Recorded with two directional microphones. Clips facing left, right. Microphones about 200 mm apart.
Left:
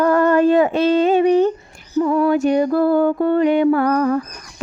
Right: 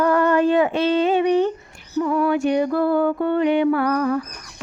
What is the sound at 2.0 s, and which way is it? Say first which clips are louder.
Mantra: left 4 dB; 35° left (ahead or behind).